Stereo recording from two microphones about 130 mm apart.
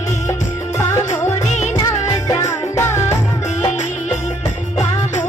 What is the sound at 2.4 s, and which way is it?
Music, 20° left (ahead or behind).